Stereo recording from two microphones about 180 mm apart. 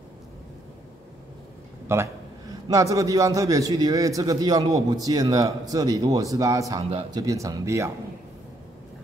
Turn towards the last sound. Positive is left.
turn(degrees=-15)  # may be behind; listen again after turning